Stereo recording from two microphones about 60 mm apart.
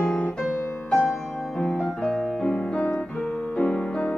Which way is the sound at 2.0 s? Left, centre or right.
Centre.